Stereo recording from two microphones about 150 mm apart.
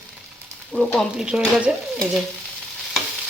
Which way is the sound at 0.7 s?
Centre (ahead or behind).